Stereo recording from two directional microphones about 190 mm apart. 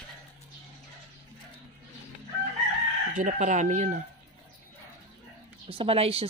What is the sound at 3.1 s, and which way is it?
Speech, 40° right (ahead or behind).